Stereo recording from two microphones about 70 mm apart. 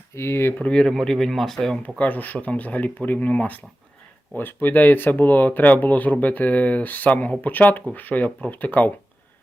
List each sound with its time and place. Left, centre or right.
0.1 s speech: left
0.6 s speech: centre
2.0 s speech: left